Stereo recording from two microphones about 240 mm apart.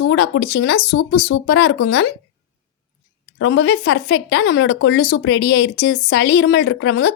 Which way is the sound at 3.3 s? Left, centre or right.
Left.